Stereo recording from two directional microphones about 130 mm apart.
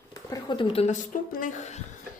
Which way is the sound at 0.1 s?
30° left (ahead or behind).